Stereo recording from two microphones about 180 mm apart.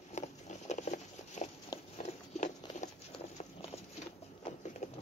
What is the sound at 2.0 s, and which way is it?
Walk, 40° left (ahead or behind).